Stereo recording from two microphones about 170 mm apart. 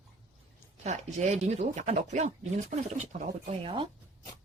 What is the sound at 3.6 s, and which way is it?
Speech, 30° right (ahead or behind).